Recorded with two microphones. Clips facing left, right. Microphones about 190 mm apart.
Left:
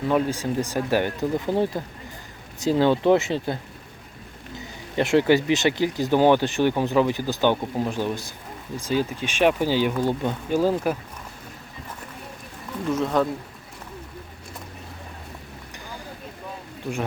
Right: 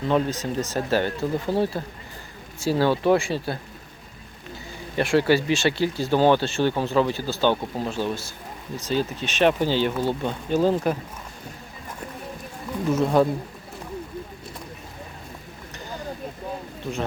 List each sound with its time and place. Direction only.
0.1 s speech: 10° left (ahead or behind)
12.9 s speech: 10° right (ahead or behind)